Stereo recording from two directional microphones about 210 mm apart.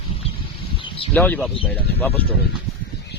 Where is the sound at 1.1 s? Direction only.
5° left (ahead or behind).